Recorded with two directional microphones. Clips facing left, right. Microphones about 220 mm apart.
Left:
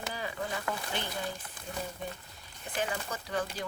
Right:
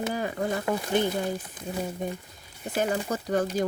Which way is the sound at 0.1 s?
45° right (ahead or behind).